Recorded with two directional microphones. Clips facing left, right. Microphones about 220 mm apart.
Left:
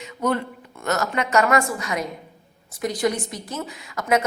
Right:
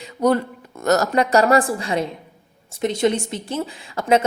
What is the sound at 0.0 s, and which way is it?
A woman's voice, 35° right (ahead or behind).